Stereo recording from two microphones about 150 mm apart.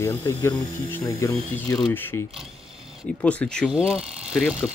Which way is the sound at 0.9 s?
20° left (ahead or behind).